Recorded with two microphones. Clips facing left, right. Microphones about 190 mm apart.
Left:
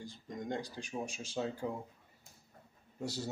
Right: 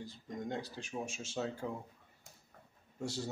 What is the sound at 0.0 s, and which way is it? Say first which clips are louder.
Speech: right 1 dB; 5° right (ahead or behind).